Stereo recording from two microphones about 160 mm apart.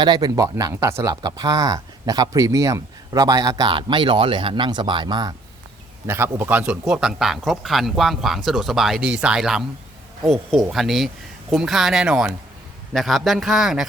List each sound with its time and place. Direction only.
0.0 s speech: 25° right (ahead or behind)
6.1 s speech: 15° right (ahead or behind)